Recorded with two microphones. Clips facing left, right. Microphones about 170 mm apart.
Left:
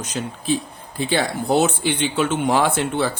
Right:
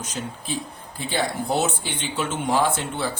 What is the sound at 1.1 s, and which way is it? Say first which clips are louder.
Speech: left 4 dB; 80° left.